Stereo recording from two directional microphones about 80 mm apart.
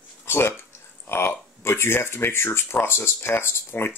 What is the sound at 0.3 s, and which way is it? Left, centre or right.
Speech, left.